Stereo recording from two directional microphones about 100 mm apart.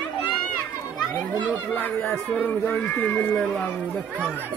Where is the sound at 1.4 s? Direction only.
20° left (ahead or behind).